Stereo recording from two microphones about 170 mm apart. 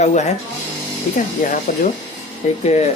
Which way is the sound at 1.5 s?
50° left (ahead or behind).